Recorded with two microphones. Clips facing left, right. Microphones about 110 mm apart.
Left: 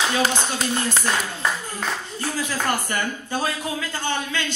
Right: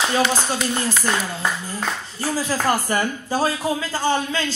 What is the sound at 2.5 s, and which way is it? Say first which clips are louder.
A man's voice: right 5 dB; 35° right (ahead or behind).